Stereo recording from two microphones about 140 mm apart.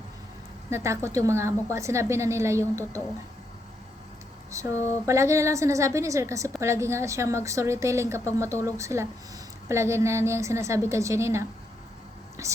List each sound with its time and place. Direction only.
0.7 s a woman's voice: 20° right (ahead or behind)
4.5 s a woman's voice: 20° right (ahead or behind)